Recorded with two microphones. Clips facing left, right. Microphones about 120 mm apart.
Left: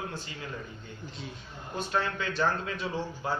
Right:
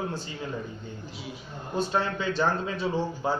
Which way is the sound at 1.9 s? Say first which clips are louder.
Even; 25° right (ahead or behind).